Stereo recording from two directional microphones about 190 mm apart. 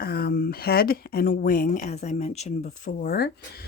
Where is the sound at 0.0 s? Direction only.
55° left (ahead or behind).